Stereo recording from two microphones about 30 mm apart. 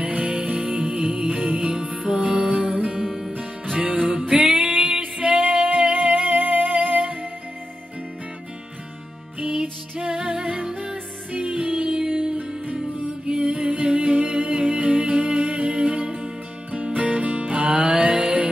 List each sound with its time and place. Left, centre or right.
0.1 s music: right
3.0 s music: centre
3.9 s music: right
6.3 s music: right
9.4 s music: right
10.1 s music: right
10.4 s music: right
11.7 s music: right
12.1 s music: right
13.4 s music: right
17.0 s music: right